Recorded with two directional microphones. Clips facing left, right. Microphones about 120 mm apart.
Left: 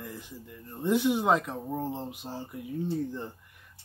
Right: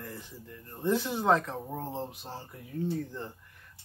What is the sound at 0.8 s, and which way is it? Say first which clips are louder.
Speech: left 3 dB; 15° left (ahead or behind).